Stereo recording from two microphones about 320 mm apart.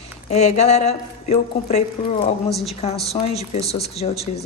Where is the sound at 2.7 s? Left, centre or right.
Centre.